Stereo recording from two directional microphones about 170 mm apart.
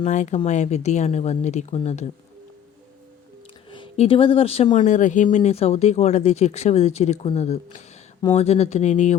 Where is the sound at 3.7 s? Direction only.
35° left (ahead or behind).